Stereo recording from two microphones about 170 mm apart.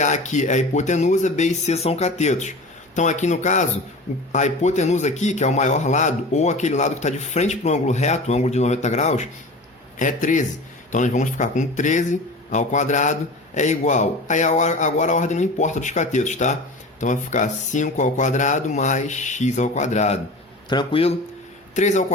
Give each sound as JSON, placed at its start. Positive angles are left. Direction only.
{"t": 0.0, "sound": "a man's voice", "side_deg": 45}
{"t": 20.7, "sound": "speech", "side_deg": 30}
{"t": 21.8, "sound": "a man's voice", "side_deg": 45}